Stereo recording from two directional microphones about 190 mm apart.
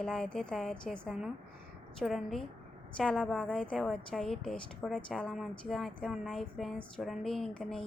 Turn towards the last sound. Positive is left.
turn(degrees=0)  # may be behind; listen again after turning